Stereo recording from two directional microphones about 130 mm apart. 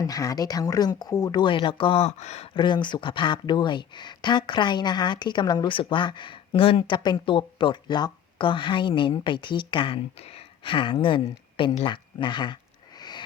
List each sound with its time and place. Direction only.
0.0 s speech: 25° left (ahead or behind); by 2.5 s 60° left (ahead or behind)
2.6 s speech: 35° left (ahead or behind)
13.0 s a sound: 35° left (ahead or behind)